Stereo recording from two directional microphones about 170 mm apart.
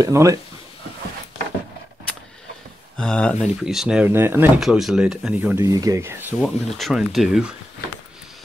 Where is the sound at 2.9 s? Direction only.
5° left (ahead or behind); by 6.5 s 15° right (ahead or behind).